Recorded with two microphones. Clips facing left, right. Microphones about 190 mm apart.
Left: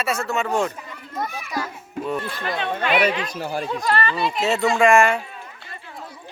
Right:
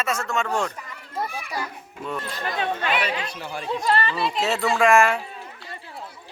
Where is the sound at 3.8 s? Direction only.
30° right (ahead or behind).